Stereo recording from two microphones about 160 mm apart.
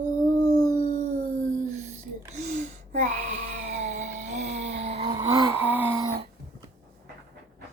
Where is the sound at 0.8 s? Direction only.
50° right (ahead or behind).